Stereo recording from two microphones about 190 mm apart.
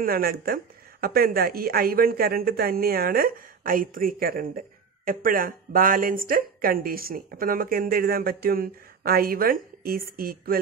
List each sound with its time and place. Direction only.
0.0 s a woman's voice: 50° right (ahead or behind)